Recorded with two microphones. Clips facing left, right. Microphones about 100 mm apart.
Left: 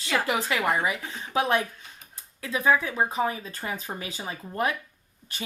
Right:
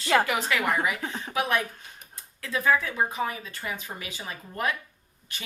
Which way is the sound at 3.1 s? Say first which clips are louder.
Left 3 dB; 30° left (ahead or behind).